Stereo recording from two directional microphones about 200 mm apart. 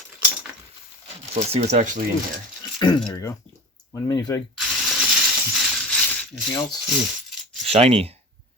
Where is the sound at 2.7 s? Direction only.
20° left (ahead or behind).